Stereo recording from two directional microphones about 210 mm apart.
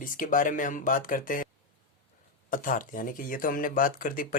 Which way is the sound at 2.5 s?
40° left (ahead or behind).